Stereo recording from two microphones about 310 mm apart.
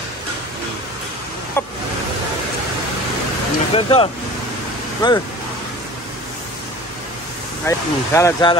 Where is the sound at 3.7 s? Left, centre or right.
Centre.